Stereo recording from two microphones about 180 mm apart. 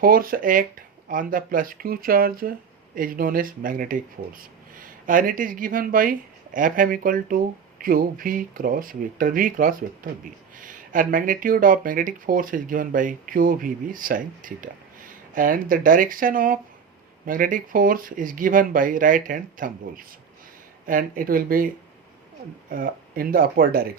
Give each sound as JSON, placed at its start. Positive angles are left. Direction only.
{"t": 0.0, "sound": "speech", "side_deg": -55}
{"t": 22.7, "sound": "speech", "side_deg": -50}